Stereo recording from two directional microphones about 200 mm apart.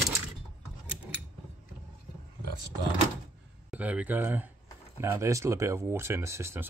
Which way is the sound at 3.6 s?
5° right (ahead or behind).